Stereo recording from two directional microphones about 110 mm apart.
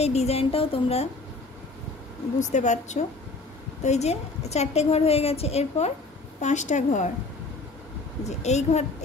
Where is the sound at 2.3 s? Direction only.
90° left; by 5.9 s 70° left (ahead or behind).